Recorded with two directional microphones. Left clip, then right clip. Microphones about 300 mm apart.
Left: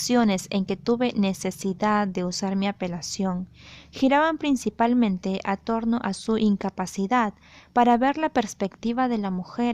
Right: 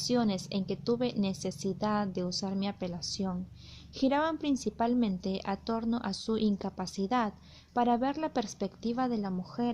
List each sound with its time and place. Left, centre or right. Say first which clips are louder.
0.1 s a woman's voice: left 9 dB; left